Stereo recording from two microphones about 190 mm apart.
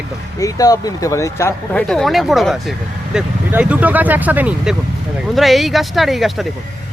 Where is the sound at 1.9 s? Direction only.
Centre (ahead or behind).